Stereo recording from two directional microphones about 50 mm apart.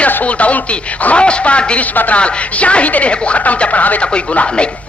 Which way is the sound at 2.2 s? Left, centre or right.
Left.